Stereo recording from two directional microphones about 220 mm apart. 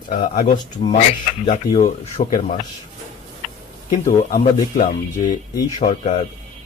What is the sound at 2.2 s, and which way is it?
Speech, 25° left (ahead or behind).